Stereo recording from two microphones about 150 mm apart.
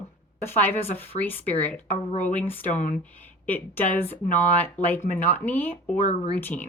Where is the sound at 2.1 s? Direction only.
55° left (ahead or behind).